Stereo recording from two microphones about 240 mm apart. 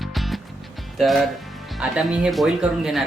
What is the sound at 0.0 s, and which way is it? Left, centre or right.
Music, centre.